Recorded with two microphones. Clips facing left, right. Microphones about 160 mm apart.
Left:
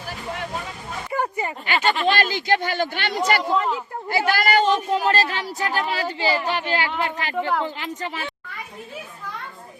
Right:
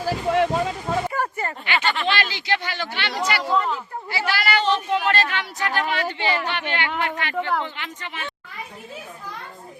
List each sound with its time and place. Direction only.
0.0 s boat: 90° right
1.1 s a sound: 20° left (ahead or behind)
1.6 s speech: 45° left (ahead or behind)